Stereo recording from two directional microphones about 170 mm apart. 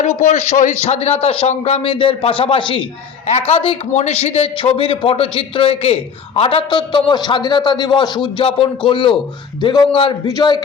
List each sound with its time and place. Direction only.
0.0 s a man's voice: 40° left (ahead or behind); by 10.6 s 20° left (ahead or behind)